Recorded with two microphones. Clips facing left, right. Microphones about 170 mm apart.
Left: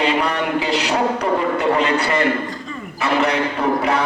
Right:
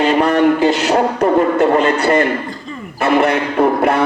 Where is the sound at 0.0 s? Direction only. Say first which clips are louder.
Right 7 dB; 45° right (ahead or behind).